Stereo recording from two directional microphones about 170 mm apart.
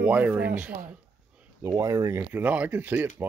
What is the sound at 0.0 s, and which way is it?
Speech, 10° right (ahead or behind).